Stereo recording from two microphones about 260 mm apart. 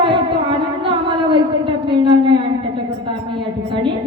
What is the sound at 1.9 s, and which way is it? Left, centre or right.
Speech, centre.